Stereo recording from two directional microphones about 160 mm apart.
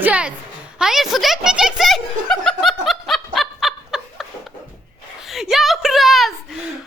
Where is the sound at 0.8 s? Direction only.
Centre (ahead or behind).